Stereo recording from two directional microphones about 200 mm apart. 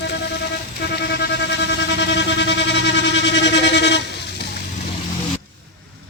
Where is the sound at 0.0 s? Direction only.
55° left (ahead or behind).